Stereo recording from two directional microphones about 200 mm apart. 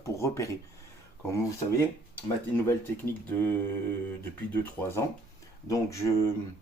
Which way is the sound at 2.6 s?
10° left (ahead or behind).